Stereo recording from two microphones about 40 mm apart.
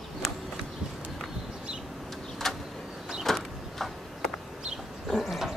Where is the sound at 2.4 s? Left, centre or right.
Centre.